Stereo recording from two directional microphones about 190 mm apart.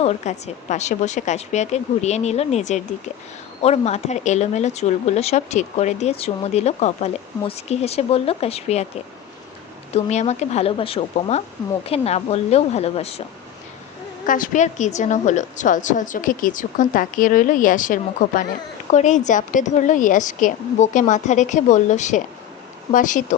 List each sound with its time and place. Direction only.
0.0 s speech: 35° left (ahead or behind)
9.9 s speech: 35° left (ahead or behind)
14.3 s a woman's voice: 45° left (ahead or behind)